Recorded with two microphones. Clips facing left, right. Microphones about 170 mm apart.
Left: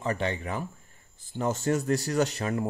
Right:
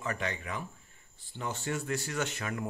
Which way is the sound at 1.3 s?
45° left (ahead or behind).